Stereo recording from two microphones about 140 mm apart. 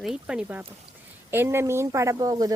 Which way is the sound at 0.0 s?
5° right (ahead or behind).